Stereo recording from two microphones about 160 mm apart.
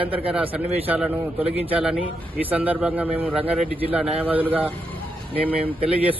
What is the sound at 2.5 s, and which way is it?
A man's voice, 10° right (ahead or behind).